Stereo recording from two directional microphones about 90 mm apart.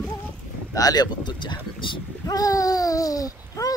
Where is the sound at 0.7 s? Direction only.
45° left (ahead or behind); by 1.9 s 60° left (ahead or behind).